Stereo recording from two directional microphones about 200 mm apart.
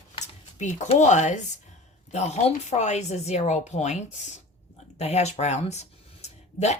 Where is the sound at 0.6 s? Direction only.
35° left (ahead or behind).